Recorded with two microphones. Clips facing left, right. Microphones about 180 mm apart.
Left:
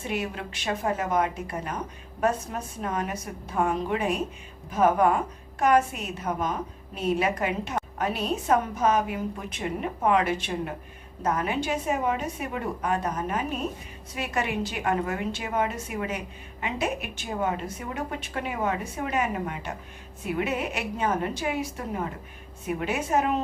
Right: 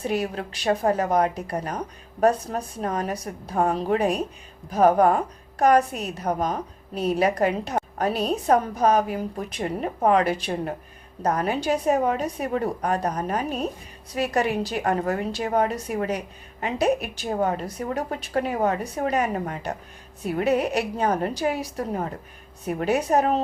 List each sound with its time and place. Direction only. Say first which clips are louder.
0.0 s a woman's voice: right 5 dB; 35° right (ahead or behind)